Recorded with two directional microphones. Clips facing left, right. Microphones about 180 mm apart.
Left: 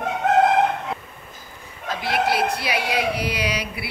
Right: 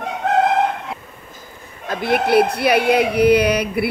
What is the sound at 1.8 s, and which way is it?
Speech, 55° right (ahead or behind).